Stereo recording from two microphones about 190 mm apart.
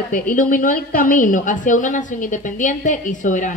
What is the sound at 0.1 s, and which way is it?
A woman's voice, 45° left (ahead or behind).